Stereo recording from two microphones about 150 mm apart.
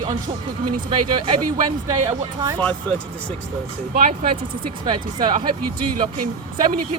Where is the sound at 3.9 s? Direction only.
45° right (ahead or behind).